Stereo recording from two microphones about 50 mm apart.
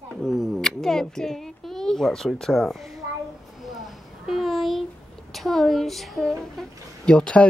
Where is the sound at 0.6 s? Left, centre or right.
Centre.